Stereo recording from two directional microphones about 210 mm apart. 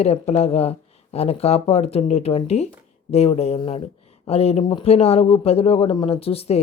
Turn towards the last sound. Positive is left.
turn(degrees=30)  # may be behind; listen again after turning